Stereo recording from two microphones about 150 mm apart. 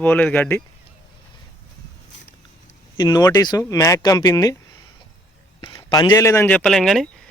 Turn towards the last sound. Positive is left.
turn(degrees=0)  # may be behind; listen again after turning